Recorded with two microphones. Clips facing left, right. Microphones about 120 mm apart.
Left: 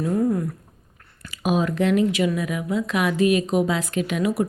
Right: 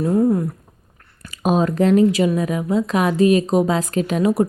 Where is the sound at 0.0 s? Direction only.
30° right (ahead or behind).